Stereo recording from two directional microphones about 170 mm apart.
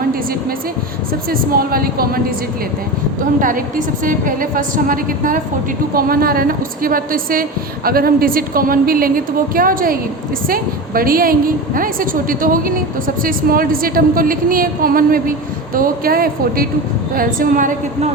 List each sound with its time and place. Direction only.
1.3 s a woman's voice: 60° right (ahead or behind)
3.4 s a woman's voice: 50° right (ahead or behind)